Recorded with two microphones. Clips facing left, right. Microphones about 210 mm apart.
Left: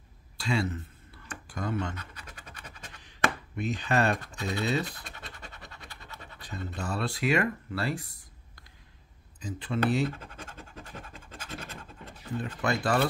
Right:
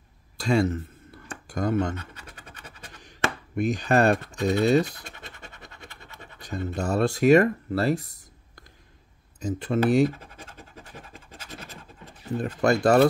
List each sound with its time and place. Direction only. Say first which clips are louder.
0.4 s a sound: right 7 dB; 45° right (ahead or behind)
3.0 s speech: right 1 dB; 45° right (ahead or behind)
6.4 s speech: right 8 dB; 45° right (ahead or behind)
9.4 s speech: right 6 dB; 45° right (ahead or behind)
12.4 s speech: right 8 dB; 45° right (ahead or behind)